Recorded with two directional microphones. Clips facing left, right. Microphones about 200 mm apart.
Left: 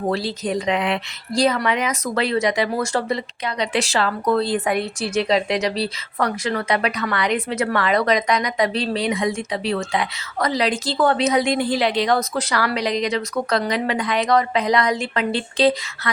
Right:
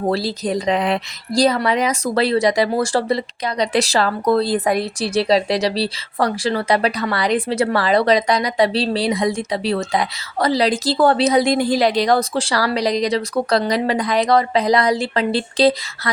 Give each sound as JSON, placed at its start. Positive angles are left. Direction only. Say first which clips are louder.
{"t": 0.1, "sound": "speech", "louder": "right 2 dB", "side_deg": -35}